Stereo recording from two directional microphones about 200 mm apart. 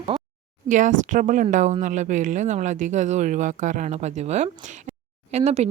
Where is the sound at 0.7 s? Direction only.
40° right (ahead or behind).